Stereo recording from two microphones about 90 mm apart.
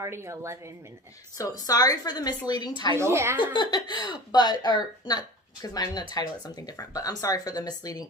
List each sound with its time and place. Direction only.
0.0 s speech: 30° right (ahead or behind)
1.4 s speech: 45° left (ahead or behind)
3.0 s speech: 30° right (ahead or behind)
3.5 s speech: 60° left (ahead or behind)